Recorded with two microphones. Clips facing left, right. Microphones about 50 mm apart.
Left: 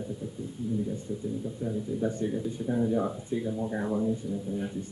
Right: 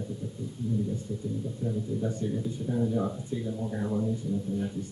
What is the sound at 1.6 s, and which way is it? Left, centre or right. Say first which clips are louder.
Speech: left 1 dB; centre.